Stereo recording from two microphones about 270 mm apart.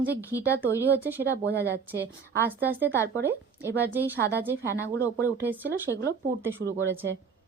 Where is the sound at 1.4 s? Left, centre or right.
Right.